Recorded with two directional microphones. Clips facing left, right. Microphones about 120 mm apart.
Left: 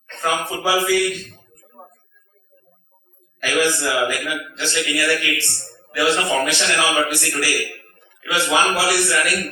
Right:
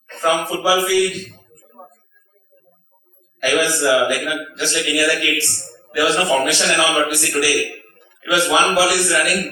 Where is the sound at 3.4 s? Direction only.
20° right (ahead or behind).